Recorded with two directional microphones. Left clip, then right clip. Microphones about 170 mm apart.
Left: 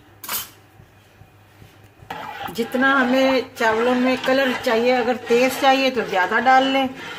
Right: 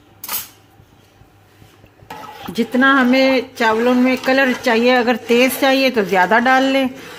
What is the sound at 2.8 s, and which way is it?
Speech, 45° right (ahead or behind).